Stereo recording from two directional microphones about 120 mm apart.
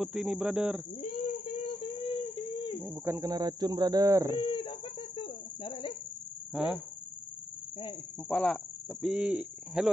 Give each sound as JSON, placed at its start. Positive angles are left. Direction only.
{"t": 0.0, "sound": "a man's voice", "side_deg": -5}
{"t": 2.0, "sound": "baby cry", "side_deg": 45}
{"t": 2.8, "sound": "a man's voice", "side_deg": -15}
{"t": 3.2, "sound": "speech", "side_deg": -35}
{"t": 4.4, "sound": "a sound", "side_deg": 40}
{"t": 6.5, "sound": "speech", "side_deg": -5}
{"t": 8.3, "sound": "speech", "side_deg": 5}
{"t": 9.0, "sound": "a man's voice", "side_deg": -10}